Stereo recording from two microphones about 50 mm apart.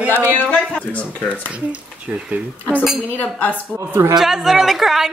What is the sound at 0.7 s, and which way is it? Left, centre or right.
Speech, left.